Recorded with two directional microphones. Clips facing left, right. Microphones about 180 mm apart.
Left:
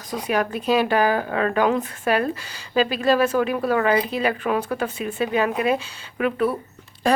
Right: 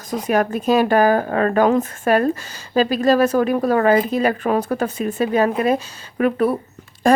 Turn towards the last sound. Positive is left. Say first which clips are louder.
# right 5 dB
turn(degrees=-45)  # may be behind; listen again after turning